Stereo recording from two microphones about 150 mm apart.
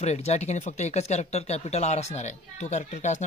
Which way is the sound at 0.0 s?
45° left (ahead or behind).